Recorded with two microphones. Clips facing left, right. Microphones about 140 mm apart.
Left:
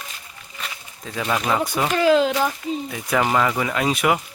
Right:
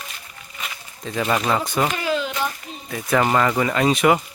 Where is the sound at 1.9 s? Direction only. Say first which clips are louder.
Left 7 dB; 90° left.